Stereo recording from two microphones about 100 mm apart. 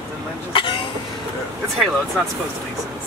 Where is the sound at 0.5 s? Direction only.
60° left (ahead or behind).